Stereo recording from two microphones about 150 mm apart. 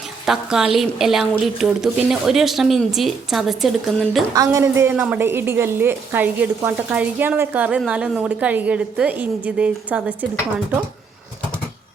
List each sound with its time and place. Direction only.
0.3 s a woman's voice: 5° right (ahead or behind)
4.4 s a woman's voice: 20° right (ahead or behind)